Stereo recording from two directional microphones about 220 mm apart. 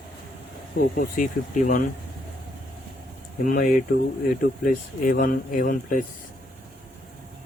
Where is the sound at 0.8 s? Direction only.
40° left (ahead or behind).